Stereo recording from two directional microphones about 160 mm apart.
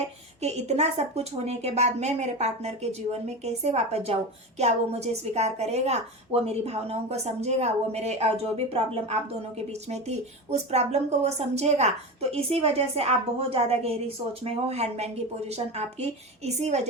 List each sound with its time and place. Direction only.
0.4 s a woman's voice: 45° right (ahead or behind)